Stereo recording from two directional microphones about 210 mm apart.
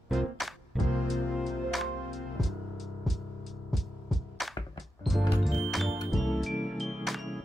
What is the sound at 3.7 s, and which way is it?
Music, centre (ahead or behind).